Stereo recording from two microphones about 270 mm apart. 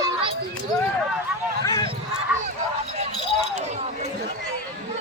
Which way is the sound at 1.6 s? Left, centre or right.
Centre.